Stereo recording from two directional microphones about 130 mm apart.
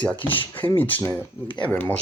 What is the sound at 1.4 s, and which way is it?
Speech, 35° left (ahead or behind).